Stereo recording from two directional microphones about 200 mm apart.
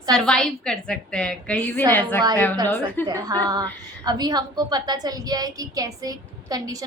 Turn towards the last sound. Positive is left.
turn(degrees=-20)  # may be behind; listen again after turning